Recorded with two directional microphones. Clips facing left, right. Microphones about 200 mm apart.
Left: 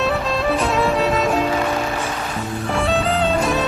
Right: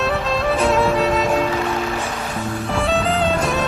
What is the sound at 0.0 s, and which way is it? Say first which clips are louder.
Music: even; centre (ahead or behind).